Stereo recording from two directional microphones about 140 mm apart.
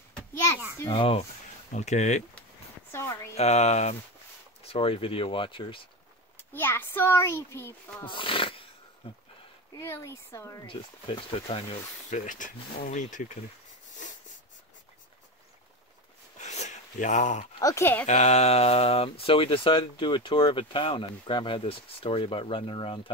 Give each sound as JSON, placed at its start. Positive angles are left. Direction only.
{"t": 0.3, "sound": "a sound", "side_deg": 20}
{"t": 0.8, "sound": "speech", "side_deg": 40}
{"t": 1.7, "sound": "speech", "side_deg": 55}
{"t": 2.9, "sound": "speech", "side_deg": 15}
{"t": 3.3, "sound": "speech", "side_deg": 50}
{"t": 6.3, "sound": "a child's voice", "side_deg": 15}
{"t": 8.0, "sound": "speech", "side_deg": 35}
{"t": 9.8, "sound": "speech", "side_deg": 20}
{"t": 10.7, "sound": "speech", "side_deg": 40}
{"t": 13.9, "sound": "a sound", "side_deg": 65}
{"t": 16.3, "sound": "a sound", "side_deg": 55}
{"t": 17.6, "sound": "speech", "side_deg": 20}
{"t": 18.0, "sound": "speech", "side_deg": 55}